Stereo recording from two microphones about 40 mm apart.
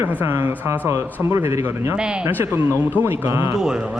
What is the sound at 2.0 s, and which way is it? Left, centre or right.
Speech, right.